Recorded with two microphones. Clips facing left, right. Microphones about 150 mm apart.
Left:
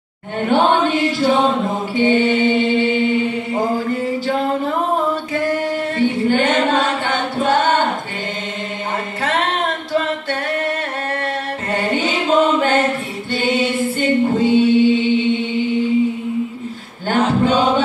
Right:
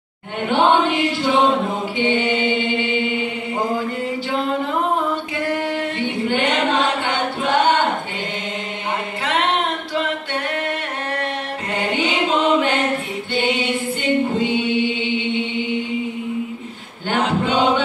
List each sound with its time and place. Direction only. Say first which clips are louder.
0.5 s chant: left 1 dB; 40° left (ahead or behind)
2.0 s mantra: left 5 dB; 40° left (ahead or behind)
5.3 s singing: left 3 dB; 40° left (ahead or behind)
7.3 s a capella: left 2 dB; 45° left (ahead or behind)
11.7 s chant: left 2 dB; 40° left (ahead or behind)
13.3 s a capella: left 3 dB; 40° left (ahead or behind)
17.1 s male singing: left 4 dB; 40° left (ahead or behind)